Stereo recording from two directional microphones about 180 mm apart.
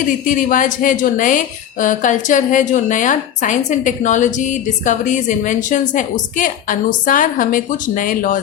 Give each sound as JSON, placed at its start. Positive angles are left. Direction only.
{"t": 0.3, "sound": "a woman's voice", "side_deg": 45}